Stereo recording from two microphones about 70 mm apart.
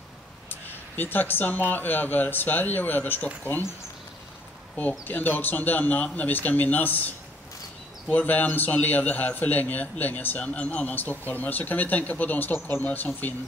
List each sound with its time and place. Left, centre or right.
0.5 s a man's voice: left
4.7 s a man's voice: left